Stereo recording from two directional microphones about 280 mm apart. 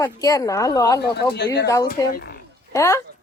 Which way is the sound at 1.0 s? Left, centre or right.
Left.